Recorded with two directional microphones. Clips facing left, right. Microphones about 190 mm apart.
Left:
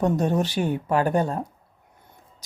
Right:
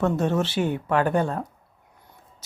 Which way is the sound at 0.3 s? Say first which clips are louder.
Even; 35° left (ahead or behind).